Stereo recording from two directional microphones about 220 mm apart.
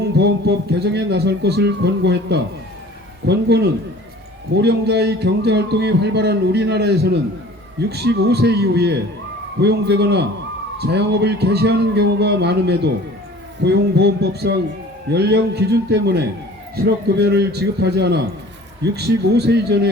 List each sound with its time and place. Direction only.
0.0 s a man's voice: 50° right (ahead or behind)